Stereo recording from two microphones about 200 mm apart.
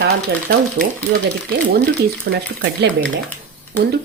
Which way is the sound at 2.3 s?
55° right (ahead or behind).